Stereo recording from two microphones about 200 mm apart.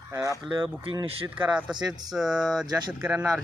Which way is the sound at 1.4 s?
5° right (ahead or behind).